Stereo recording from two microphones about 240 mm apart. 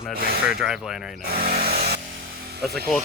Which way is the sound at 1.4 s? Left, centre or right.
Right.